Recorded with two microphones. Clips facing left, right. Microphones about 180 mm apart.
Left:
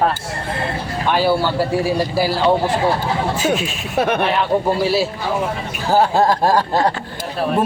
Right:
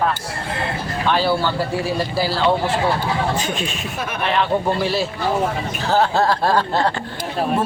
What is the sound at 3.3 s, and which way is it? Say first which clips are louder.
Speech: left 5 dB; 5° left (ahead or behind).